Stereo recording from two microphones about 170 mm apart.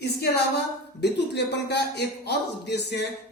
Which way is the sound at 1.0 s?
85° left.